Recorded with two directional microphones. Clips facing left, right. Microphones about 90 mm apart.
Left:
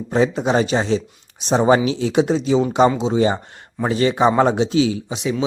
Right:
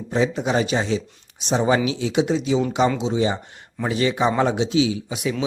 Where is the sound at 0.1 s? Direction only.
40° left (ahead or behind).